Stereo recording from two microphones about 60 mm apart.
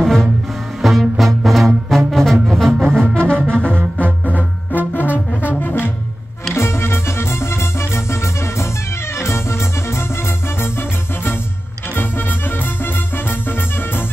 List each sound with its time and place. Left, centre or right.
0.0 s music: centre
3.2 s music: centre
4.3 s music: left
5.6 s brass instrument: left
6.5 s music: left
11.9 s music: left